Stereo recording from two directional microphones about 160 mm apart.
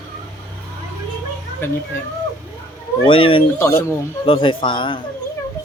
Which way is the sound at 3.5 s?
15° left (ahead or behind).